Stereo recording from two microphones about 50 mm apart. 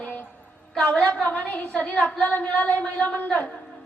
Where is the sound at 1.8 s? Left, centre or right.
Left.